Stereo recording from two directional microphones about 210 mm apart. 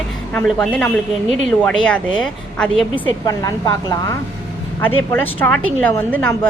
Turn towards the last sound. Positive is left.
turn(degrees=10)  # may be behind; listen again after turning